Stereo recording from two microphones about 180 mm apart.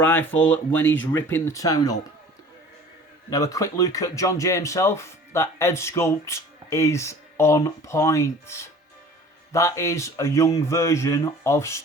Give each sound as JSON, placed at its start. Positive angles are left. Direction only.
{"t": 0.0, "sound": "speech", "side_deg": 10}
{"t": 3.2, "sound": "speech", "side_deg": 20}